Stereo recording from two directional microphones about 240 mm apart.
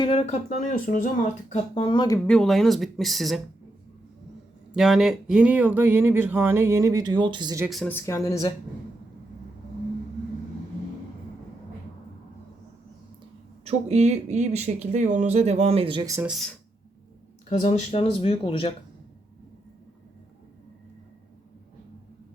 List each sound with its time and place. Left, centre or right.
0.0 s speech: left
2.2 s speech: centre
4.7 s speech: centre
7.6 s speech: centre
13.7 s speech: right
16.3 s speech: centre
17.5 s speech: left